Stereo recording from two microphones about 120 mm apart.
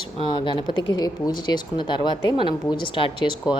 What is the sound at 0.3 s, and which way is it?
A woman's voice, 40° left (ahead or behind).